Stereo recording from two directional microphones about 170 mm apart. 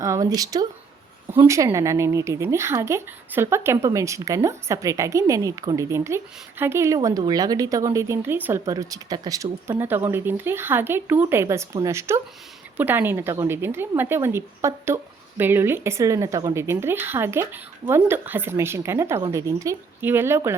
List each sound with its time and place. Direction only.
0.0 s speech: 20° right (ahead or behind)